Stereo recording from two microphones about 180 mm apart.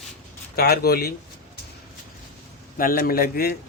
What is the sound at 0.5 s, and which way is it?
Speech, 60° left (ahead or behind).